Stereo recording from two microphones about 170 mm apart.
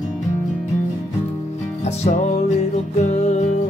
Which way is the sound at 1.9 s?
40° left (ahead or behind).